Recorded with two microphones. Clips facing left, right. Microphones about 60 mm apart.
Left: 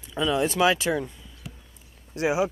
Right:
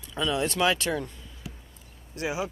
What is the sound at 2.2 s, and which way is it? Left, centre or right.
Speech, left.